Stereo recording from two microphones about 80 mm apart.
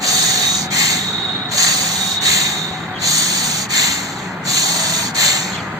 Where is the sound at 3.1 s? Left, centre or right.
Right.